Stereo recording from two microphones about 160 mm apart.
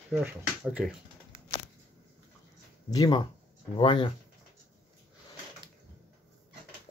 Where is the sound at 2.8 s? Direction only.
25° left (ahead or behind).